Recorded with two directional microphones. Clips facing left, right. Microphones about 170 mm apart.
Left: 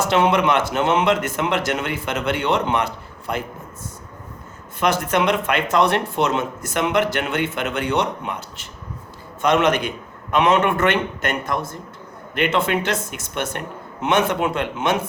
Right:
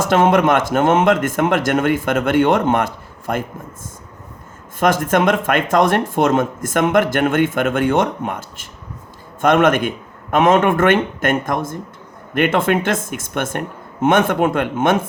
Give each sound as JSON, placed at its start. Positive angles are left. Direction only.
{"t": 0.0, "sound": "speech", "side_deg": -45}
{"t": 4.8, "sound": "speech", "side_deg": -45}